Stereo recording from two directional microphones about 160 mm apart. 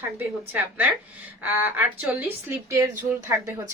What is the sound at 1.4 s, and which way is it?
A woman's voice, 10° right (ahead or behind).